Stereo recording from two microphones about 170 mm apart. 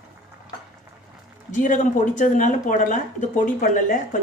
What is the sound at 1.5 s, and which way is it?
Speech, 50° left (ahead or behind).